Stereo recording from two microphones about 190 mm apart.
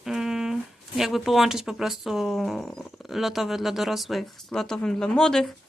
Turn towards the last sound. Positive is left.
turn(degrees=5)  # may be behind; listen again after turning